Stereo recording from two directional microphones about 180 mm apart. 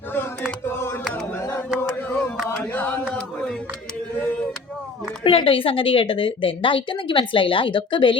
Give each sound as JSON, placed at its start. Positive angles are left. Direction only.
{"t": 0.6, "sound": "music", "side_deg": 10}
{"t": 1.4, "sound": "a sound", "side_deg": 10}
{"t": 5.2, "sound": "a woman's voice", "side_deg": 30}